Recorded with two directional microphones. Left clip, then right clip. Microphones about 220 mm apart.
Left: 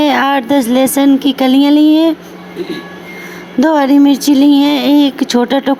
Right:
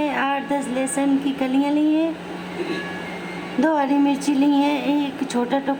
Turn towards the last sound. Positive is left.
turn(degrees=35)  # may be behind; listen again after turning